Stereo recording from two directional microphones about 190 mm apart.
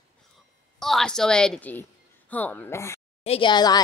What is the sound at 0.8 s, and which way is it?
A woman's voice, centre (ahead or behind).